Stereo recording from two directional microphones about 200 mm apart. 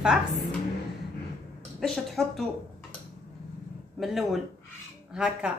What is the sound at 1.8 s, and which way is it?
Speech, centre (ahead or behind).